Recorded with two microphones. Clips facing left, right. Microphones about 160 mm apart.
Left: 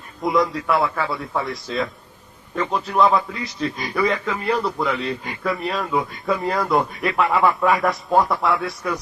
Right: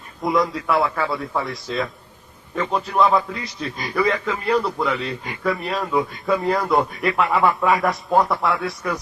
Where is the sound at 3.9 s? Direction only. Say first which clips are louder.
Right 1 dB; 5° left (ahead or behind).